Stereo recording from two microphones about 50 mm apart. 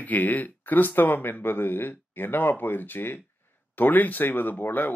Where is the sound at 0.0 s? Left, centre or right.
Left.